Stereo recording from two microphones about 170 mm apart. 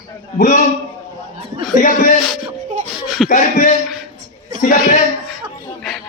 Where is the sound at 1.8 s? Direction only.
50° left (ahead or behind).